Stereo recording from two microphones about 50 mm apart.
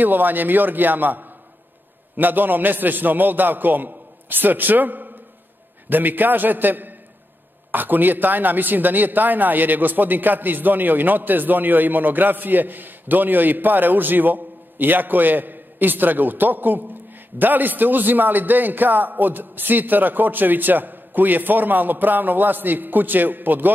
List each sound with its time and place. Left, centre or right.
0.0 s a man's voice: right